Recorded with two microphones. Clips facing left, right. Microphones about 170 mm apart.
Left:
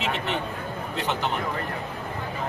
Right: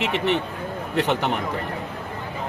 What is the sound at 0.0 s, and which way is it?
A man's voice, 70° right (ahead or behind).